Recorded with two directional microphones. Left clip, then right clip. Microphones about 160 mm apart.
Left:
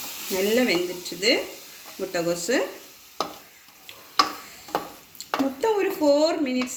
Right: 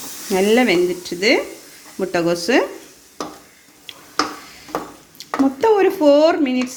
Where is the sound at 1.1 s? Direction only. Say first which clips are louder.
Right 7 dB; 80° right.